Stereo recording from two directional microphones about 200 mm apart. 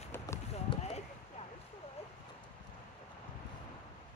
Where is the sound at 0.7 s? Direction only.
30° left (ahead or behind).